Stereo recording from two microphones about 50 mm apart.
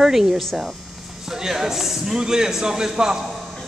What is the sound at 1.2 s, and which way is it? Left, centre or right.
A man's voice, centre.